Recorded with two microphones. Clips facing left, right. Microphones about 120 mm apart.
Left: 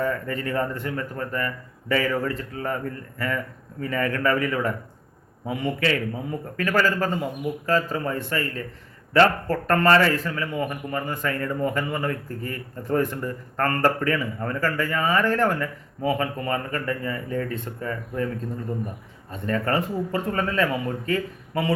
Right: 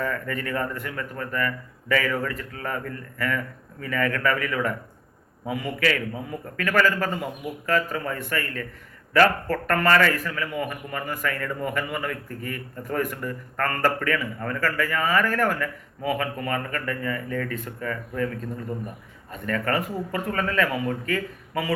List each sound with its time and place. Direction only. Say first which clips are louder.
0.0 s a man's voice: left 2 dB; 25° left (ahead or behind)
19.3 s a man's voice: left 1 dB; 25° left (ahead or behind)